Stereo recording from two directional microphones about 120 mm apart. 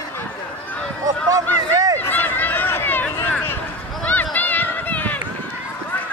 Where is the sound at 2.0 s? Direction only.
15° left (ahead or behind).